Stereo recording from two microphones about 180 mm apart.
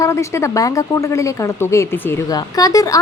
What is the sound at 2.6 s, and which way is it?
Speech, 20° left (ahead or behind).